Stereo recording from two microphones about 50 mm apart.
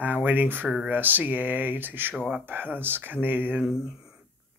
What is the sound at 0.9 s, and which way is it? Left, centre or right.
Speech, right.